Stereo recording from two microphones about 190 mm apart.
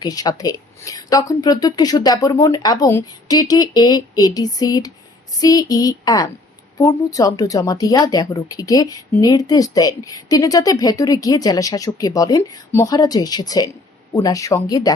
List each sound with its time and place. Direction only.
0.0 s speech: 20° left (ahead or behind)